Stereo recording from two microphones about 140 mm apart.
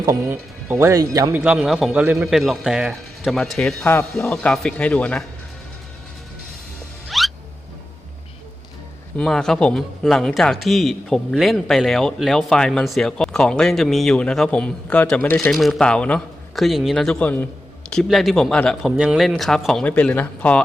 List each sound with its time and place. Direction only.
0.0 s speech: 20° right (ahead or behind)
1.4 s a man's voice: 5° right (ahead or behind)
7.1 s music: centre (ahead or behind)
9.1 s a man's voice: 5° left (ahead or behind)